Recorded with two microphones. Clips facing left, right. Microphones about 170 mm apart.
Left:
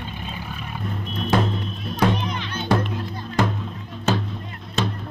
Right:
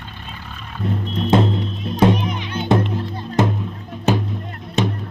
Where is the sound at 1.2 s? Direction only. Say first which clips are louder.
Right 5 dB; 25° right (ahead or behind).